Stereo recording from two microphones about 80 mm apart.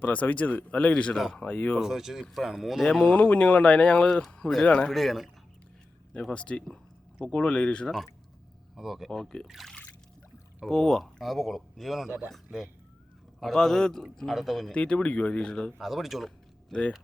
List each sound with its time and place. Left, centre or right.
0.0 s speech: centre
1.1 s speech: centre
1.4 s speech: centre
1.7 s speech: centre
3.1 s speech: centre
4.9 s speech: centre
6.3 s speech: centre
8.7 s speech: centre
14.7 s speech: centre
15.8 s speech: centre